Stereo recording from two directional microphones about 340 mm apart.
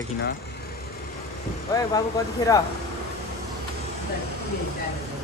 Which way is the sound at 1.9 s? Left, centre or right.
Centre.